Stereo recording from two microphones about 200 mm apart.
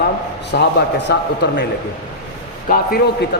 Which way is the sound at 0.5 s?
55° left (ahead or behind).